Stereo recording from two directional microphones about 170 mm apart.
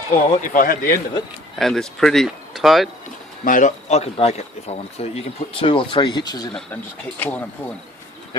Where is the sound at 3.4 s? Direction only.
50° left (ahead or behind); by 6.5 s 25° left (ahead or behind).